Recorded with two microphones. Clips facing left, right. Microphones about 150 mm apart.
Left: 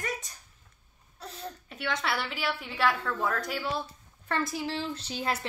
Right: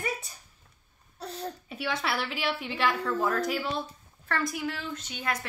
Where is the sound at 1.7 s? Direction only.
5° right (ahead or behind).